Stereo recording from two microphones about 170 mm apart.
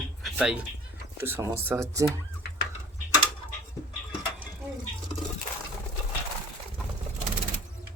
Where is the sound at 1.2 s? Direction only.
15° right (ahead or behind).